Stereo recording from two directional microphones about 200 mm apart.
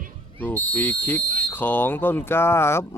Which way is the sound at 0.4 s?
10° left (ahead or behind).